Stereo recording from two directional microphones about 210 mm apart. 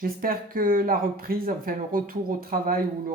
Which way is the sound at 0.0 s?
45° right (ahead or behind).